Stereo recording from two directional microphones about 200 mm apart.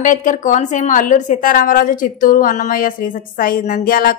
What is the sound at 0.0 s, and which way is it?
A woman's voice, 40° left (ahead or behind).